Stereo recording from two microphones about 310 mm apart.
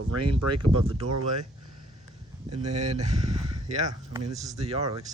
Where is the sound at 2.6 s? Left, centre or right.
Right.